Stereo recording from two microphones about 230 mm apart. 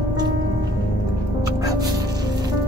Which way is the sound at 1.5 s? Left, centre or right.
Centre.